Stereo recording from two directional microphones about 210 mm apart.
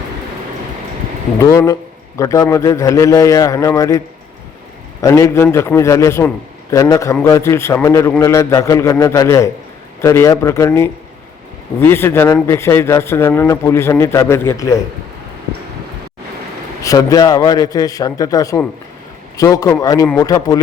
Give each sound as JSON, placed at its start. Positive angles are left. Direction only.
{"t": 1.4, "sound": "speech", "side_deg": 15}
{"t": 5.0, "sound": "speech", "side_deg": 15}
{"t": 16.8, "sound": "speech", "side_deg": 15}